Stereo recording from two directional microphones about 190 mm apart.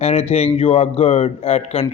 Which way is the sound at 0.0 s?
30° left (ahead or behind).